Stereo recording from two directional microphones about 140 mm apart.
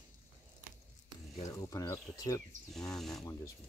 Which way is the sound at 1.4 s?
25° left (ahead or behind).